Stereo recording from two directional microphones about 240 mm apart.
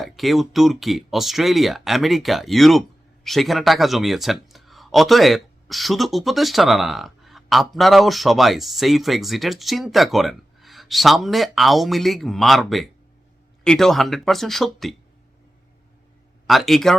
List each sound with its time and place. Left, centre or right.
0.0 s speech: centre
16.5 s speech: centre